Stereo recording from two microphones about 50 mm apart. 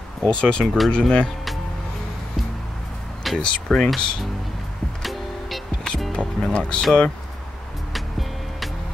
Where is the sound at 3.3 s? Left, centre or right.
Centre.